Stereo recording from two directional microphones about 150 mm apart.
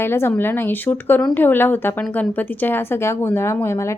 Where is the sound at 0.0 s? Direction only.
15° left (ahead or behind).